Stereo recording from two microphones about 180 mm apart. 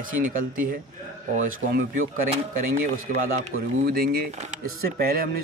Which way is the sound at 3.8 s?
55° right (ahead or behind).